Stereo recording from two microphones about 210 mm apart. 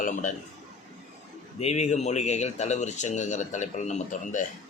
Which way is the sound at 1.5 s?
30° left (ahead or behind).